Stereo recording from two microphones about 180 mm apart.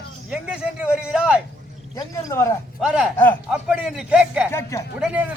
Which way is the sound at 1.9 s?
15° left (ahead or behind).